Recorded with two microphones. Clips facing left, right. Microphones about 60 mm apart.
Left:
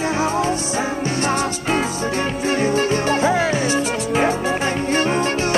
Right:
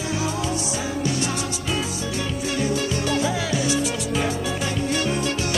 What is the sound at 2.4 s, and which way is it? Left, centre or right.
Music, left.